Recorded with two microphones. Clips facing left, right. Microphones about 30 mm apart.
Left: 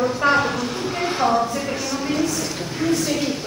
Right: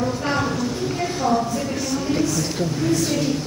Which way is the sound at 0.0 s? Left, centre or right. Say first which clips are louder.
Left 4 dB; left.